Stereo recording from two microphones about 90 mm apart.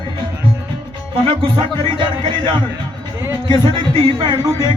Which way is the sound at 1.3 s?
70° right (ahead or behind).